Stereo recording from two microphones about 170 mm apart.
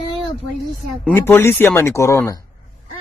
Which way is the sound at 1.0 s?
15° left (ahead or behind).